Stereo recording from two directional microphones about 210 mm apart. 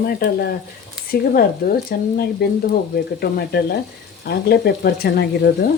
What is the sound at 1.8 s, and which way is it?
Speech, 45° left (ahead or behind).